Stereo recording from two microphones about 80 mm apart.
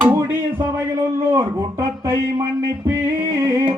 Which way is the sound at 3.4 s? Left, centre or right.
Right.